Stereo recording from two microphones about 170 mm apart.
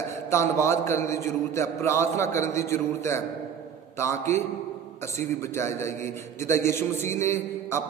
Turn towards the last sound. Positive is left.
turn(degrees=15)  # may be behind; listen again after turning